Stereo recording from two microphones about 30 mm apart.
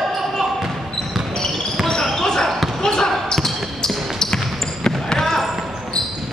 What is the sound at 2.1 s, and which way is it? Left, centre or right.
Basketball bounce, centre.